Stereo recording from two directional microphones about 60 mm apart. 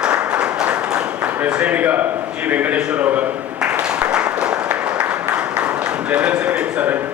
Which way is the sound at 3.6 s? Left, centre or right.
Centre.